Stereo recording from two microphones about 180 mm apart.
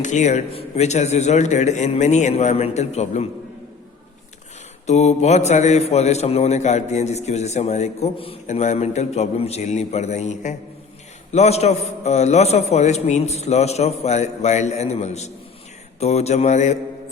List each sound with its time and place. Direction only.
0.0 s a man's voice: 40° left (ahead or behind)
4.9 s a man's voice: 40° left (ahead or behind)